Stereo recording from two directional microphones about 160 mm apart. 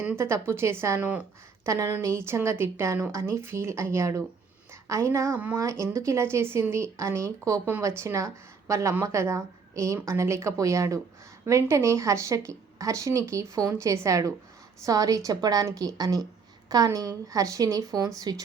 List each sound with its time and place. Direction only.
0.0 s a woman's voice: 15° right (ahead or behind)